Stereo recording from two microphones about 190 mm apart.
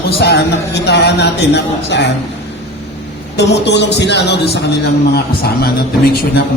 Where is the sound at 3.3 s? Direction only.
65° left (ahead or behind).